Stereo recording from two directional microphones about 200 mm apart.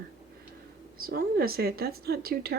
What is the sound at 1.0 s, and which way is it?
Speech, 50° right (ahead or behind).